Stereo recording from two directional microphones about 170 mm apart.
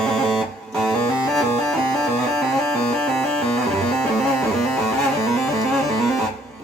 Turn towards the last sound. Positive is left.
turn(degrees=0)  # may be behind; listen again after turning